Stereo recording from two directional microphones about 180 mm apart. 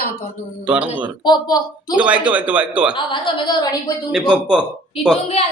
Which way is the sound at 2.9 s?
25° left (ahead or behind).